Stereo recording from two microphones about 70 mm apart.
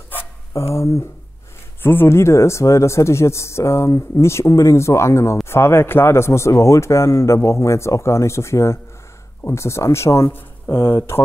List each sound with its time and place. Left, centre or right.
0.1 s a sound: left
0.6 s speech: left
1.8 s speech: left